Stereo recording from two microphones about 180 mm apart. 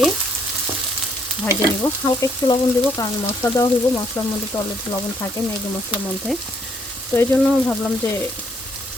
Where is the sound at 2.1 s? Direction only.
25° left (ahead or behind).